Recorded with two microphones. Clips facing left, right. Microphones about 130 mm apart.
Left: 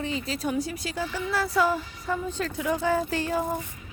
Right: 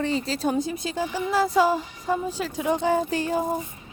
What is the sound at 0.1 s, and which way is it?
A woman's voice, 30° right (ahead or behind).